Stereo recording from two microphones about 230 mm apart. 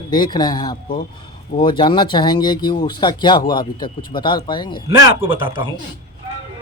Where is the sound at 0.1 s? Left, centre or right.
Centre.